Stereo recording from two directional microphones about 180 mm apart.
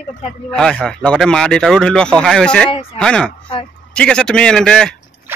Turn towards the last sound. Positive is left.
turn(degrees=5)  # may be behind; listen again after turning